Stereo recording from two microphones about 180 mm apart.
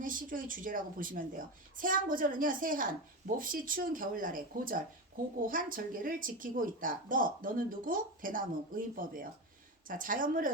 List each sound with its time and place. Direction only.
0.0 s a woman's voice: 50° right (ahead or behind)